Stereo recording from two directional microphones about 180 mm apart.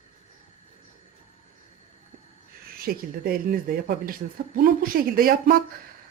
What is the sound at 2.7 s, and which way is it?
Speech, 55° right (ahead or behind).